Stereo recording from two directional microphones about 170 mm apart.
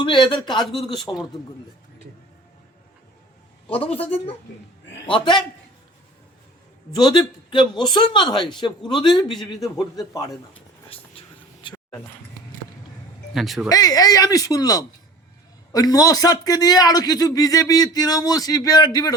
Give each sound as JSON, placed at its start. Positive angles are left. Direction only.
{"t": 0.0, "sound": "a man's voice", "side_deg": 30}
{"t": 3.7, "sound": "a man's voice", "side_deg": 35}
{"t": 5.0, "sound": "a man's voice", "side_deg": 30}
{"t": 6.9, "sound": "a man's voice", "side_deg": 25}
{"t": 9.3, "sound": "speech", "side_deg": 0}
{"t": 9.6, "sound": "a man's voice", "side_deg": 20}
{"t": 10.5, "sound": "a sound", "side_deg": 35}
{"t": 11.7, "sound": "a sound", "side_deg": 10}
{"t": 13.3, "sound": "speech", "side_deg": 0}
{"t": 13.7, "sound": "a man's voice", "side_deg": 20}